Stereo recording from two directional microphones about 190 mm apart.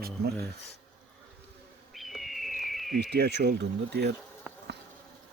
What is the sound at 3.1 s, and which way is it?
Speech, 60° right (ahead or behind).